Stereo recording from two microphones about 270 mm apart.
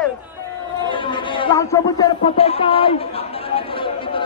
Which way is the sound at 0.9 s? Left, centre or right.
Centre.